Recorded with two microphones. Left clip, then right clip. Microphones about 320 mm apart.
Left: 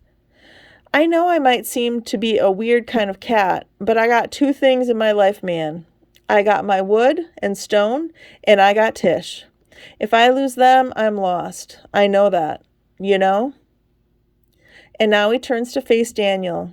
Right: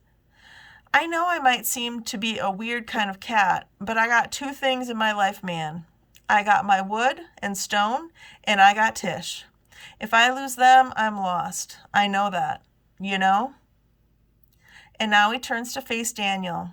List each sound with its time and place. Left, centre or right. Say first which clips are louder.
0.3 s speech: left 1 dB; centre
14.6 s speech: left 10 dB; centre